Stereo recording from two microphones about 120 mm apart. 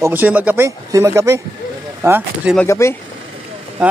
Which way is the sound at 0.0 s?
15° right (ahead or behind).